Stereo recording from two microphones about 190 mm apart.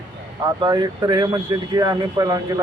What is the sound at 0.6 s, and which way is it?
Speech, 20° right (ahead or behind).